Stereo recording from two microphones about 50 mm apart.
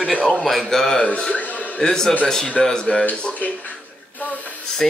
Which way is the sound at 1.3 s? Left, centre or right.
Left.